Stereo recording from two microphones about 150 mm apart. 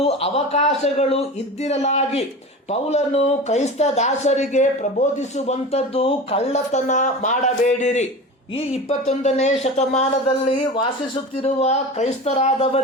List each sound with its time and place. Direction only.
0.0 s speech: 45° left (ahead or behind)
5.5 s speech: 40° left (ahead or behind)
10.8 s speech: 30° left (ahead or behind)
11.6 s speech: 45° left (ahead or behind)